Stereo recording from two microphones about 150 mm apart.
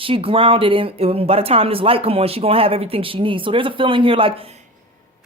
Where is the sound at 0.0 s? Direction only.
35° right (ahead or behind).